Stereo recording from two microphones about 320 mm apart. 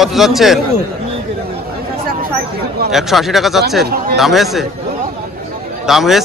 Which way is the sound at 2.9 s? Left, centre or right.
Centre.